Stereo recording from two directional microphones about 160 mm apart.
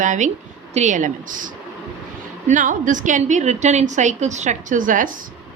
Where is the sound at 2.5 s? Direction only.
55° right (ahead or behind).